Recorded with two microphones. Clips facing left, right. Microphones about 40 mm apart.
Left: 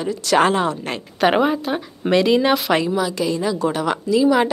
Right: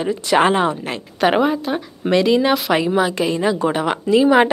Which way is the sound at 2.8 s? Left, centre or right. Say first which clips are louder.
Right 3 dB; right.